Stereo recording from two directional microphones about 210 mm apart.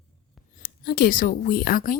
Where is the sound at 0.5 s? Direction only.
45° left (ahead or behind).